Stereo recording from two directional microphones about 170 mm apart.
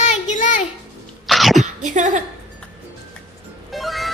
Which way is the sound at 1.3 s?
Centre (ahead or behind).